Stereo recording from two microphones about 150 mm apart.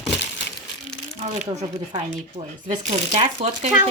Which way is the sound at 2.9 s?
45° right (ahead or behind).